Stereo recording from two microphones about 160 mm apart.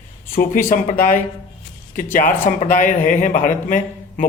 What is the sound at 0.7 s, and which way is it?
Speech, 55° left (ahead or behind).